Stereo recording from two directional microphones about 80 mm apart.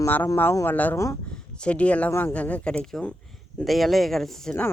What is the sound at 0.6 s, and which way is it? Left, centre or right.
Speech, left.